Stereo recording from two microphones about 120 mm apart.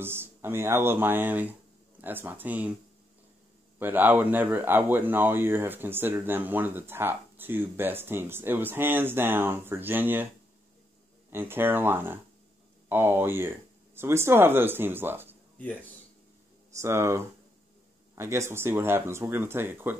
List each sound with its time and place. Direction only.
0.0 s speech: 20° right (ahead or behind)
3.8 s speech: 15° right (ahead or behind)
11.2 s speech: 20° right (ahead or behind)
15.6 s speech: 15° left (ahead or behind)
16.7 s speech: 25° right (ahead or behind)